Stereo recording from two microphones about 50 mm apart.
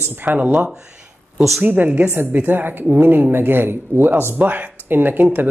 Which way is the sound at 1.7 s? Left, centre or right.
Right.